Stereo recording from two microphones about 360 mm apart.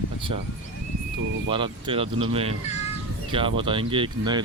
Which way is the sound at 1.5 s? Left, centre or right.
Centre.